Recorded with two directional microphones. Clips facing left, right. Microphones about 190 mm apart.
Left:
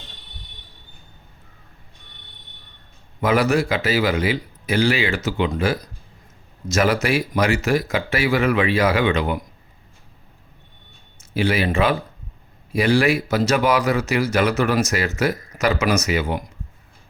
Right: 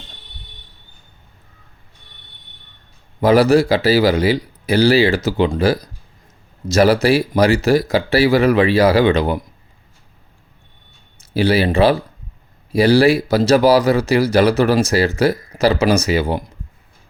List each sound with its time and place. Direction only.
3.2 s speech: 35° right (ahead or behind)
11.2 s speech: 35° right (ahead or behind)